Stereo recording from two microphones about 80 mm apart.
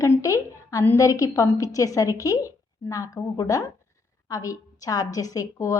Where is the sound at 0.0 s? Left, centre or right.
Left.